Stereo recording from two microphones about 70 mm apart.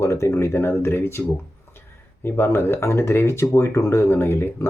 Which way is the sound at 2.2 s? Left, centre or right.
Left.